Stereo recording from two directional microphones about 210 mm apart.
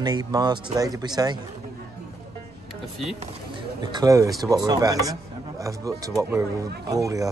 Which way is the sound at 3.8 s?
20° right (ahead or behind).